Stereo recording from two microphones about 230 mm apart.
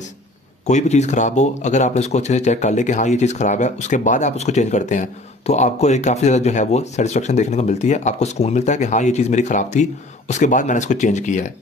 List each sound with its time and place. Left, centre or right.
0.7 s speech: left